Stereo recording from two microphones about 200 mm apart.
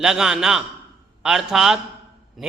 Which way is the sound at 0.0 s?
5° right (ahead or behind).